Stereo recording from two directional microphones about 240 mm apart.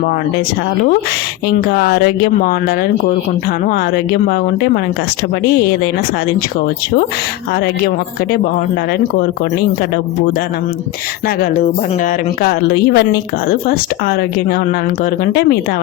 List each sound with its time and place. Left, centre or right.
1.5 s speech: left
12.4 s speech: left